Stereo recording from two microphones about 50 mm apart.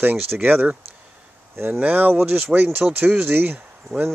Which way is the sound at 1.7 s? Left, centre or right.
Right.